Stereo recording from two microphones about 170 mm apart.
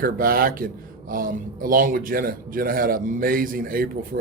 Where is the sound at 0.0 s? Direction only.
55° right (ahead or behind).